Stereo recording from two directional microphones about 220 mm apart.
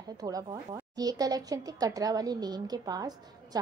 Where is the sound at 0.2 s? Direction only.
15° right (ahead or behind).